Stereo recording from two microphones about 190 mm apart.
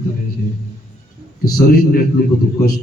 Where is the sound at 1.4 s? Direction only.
50° left (ahead or behind).